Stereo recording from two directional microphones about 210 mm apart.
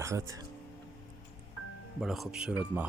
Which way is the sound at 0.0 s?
15° right (ahead or behind).